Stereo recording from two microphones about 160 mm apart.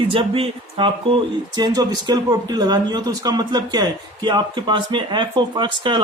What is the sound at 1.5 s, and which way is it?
A man's voice, 25° right (ahead or behind).